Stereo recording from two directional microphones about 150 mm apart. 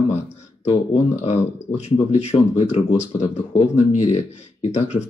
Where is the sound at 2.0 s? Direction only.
45° left (ahead or behind).